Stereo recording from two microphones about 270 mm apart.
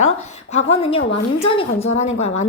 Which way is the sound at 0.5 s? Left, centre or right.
Left.